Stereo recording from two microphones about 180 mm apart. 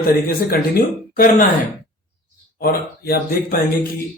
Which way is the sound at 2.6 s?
55° left (ahead or behind).